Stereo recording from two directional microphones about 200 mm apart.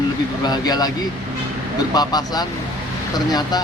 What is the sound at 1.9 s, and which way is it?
Speech, 20° left (ahead or behind).